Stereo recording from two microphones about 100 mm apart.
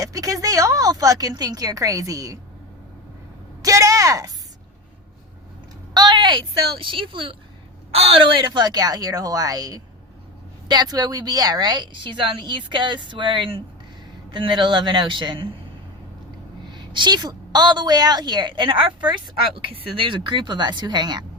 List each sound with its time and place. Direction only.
0.0 s speech: 35° right (ahead or behind)
3.6 s a sound: 35° right (ahead or behind)
5.9 s a sound: 50° right (ahead or behind)
6.8 s speech: 55° right (ahead or behind)
7.9 s a woman's voice: 80° right; by 15.4 s 50° right (ahead or behind)
16.6 s a woman's voice: 50° right (ahead or behind)